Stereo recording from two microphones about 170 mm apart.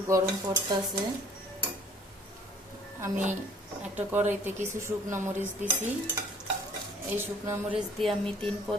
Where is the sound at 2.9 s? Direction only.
15° right (ahead or behind).